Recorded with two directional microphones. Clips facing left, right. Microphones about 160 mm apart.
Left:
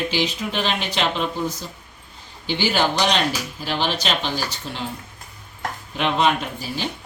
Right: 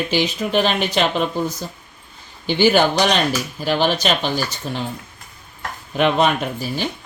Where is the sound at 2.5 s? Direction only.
50° right (ahead or behind).